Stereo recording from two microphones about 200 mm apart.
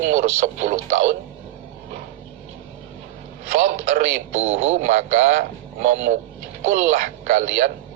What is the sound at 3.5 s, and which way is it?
Speech, 35° right (ahead or behind).